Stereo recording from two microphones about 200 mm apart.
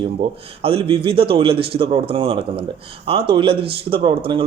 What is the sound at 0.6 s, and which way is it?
A man's voice, 30° right (ahead or behind).